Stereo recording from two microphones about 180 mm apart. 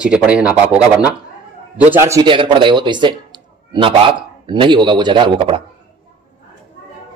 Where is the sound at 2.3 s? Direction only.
25° right (ahead or behind).